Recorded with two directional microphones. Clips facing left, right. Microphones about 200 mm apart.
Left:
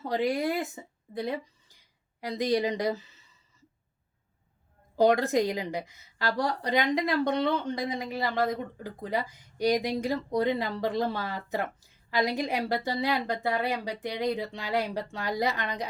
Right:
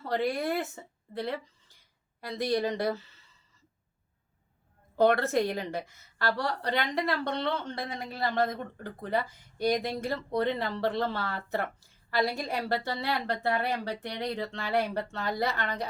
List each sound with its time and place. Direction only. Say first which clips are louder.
0.0 s a woman's voice: left 2 dB; 15° left (ahead or behind)
4.9 s a woman's voice: left 1 dB; 15° left (ahead or behind)